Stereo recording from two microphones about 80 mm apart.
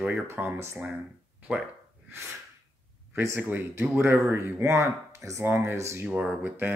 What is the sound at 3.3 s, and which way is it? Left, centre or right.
Speech, right.